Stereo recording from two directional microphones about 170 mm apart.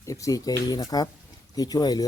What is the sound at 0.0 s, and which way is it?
Speech, 20° left (ahead or behind).